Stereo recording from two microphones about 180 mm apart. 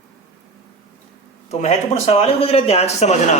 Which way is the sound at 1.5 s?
40° left (ahead or behind).